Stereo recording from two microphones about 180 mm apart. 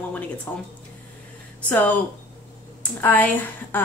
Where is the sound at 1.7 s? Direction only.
10° left (ahead or behind).